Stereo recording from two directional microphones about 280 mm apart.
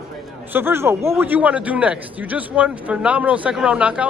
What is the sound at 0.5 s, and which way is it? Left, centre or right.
A man's voice, centre.